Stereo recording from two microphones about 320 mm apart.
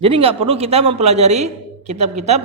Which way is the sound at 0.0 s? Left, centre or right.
Centre.